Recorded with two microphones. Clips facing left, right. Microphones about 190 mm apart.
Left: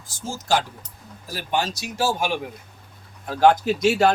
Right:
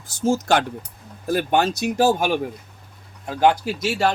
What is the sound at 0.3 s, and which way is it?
Speech, 60° right (ahead or behind).